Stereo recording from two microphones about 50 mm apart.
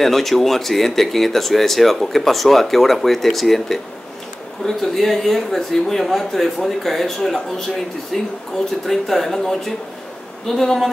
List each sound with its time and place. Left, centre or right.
0.0 s a woman's voice: centre